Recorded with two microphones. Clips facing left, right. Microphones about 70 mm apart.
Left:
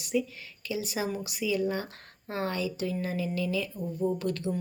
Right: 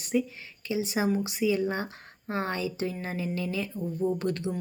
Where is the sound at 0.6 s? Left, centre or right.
Right.